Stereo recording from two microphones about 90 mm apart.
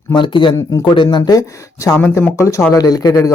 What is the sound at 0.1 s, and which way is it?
Speech, 65° left (ahead or behind).